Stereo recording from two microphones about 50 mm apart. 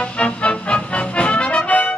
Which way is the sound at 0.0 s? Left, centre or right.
Left.